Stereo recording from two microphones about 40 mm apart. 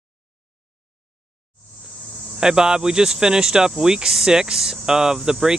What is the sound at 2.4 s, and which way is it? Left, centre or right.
Speech, centre.